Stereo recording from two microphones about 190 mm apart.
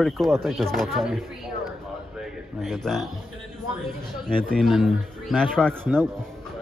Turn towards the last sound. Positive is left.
turn(degrees=-10)  # may be behind; listen again after turning